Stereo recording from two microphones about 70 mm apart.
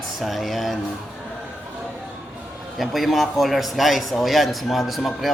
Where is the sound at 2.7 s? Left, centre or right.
Centre.